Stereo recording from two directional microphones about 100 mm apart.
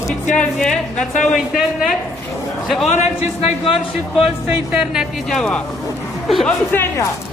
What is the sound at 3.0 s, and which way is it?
Speech, 90° left.